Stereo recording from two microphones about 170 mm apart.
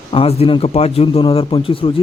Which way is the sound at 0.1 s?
35° left (ahead or behind).